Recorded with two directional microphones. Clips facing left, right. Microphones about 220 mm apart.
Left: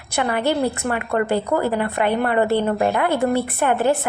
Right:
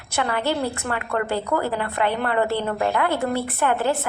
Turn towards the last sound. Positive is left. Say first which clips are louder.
# left 3 dB
turn(degrees=15)  # may be behind; listen again after turning